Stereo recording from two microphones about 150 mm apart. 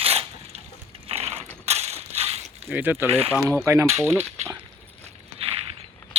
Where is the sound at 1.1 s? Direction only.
45° right (ahead or behind).